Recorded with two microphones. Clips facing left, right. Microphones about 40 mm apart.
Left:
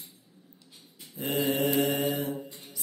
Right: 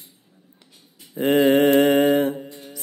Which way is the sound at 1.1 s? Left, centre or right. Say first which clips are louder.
Right 12 dB; right.